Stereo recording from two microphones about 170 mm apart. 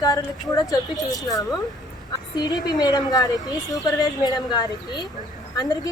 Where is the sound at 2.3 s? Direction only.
25° left (ahead or behind).